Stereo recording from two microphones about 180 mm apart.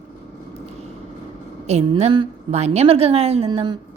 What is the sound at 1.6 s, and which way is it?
A woman's voice, 35° right (ahead or behind).